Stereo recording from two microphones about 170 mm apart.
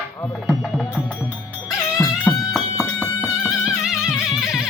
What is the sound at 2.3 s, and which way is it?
Music, 15° left (ahead or behind).